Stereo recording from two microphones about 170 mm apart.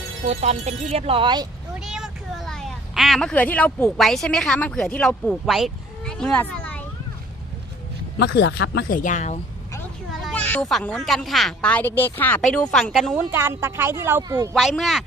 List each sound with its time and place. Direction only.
0.3 s speech: 40° right (ahead or behind)
1.8 s speech: 5° right (ahead or behind)
8.2 s speech: 85° left; by 9.4 s 45° left (ahead or behind)
10.2 s a sound: centre (ahead or behind)
10.4 s speech: 5° left (ahead or behind)
13.3 s a woman's voice: 15° right (ahead or behind)
14.5 s speech: centre (ahead or behind)